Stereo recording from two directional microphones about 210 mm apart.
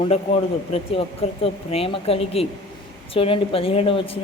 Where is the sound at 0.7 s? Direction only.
30° left (ahead or behind).